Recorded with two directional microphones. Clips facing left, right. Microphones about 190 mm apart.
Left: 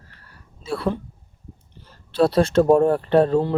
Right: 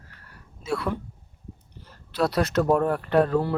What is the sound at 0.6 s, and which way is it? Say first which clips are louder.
Speech: left 3 dB; 30° left (ahead or behind).